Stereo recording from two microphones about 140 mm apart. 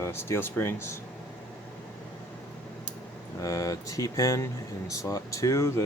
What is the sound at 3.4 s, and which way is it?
Speech, 25° left (ahead or behind).